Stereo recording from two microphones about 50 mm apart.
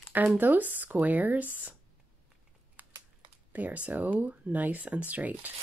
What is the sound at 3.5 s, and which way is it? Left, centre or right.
Speech, right.